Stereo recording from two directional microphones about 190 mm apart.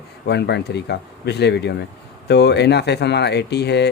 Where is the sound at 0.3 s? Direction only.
60° left (ahead or behind).